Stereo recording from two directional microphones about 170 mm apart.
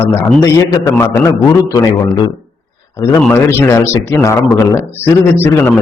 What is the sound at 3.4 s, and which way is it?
A man's voice, 15° left (ahead or behind).